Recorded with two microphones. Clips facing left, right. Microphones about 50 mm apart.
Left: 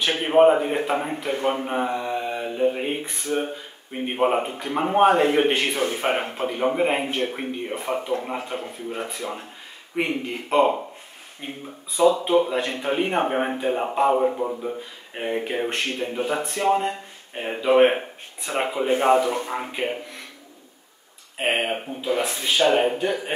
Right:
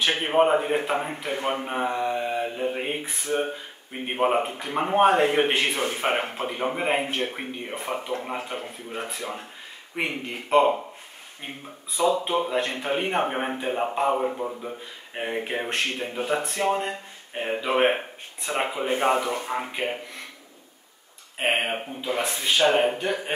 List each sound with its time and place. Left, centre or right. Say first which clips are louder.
0.3 s speech: left 5 dB; centre
21.4 s speech: left 1 dB; centre